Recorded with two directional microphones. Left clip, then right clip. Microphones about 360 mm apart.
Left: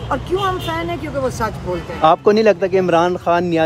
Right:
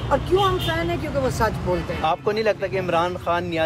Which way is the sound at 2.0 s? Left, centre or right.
Left.